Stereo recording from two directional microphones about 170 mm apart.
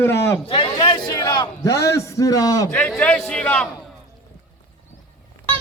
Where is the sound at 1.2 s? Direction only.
25° left (ahead or behind).